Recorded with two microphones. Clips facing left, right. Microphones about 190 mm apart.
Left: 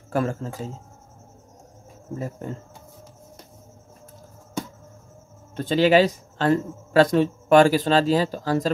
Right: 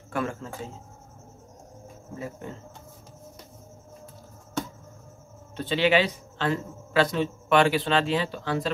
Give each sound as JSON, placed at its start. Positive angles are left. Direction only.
{"t": 0.1, "sound": "a man's voice", "side_deg": 40}
{"t": 2.1, "sound": "a man's voice", "side_deg": 40}
{"t": 5.6, "sound": "a man's voice", "side_deg": 40}